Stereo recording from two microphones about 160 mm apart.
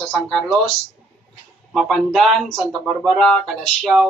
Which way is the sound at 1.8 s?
Centre (ahead or behind).